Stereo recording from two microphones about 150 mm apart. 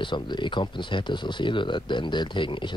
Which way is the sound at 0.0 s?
30° left (ahead or behind).